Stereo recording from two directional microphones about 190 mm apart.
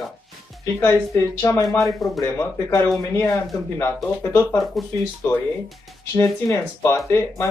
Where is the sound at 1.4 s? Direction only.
15° left (ahead or behind).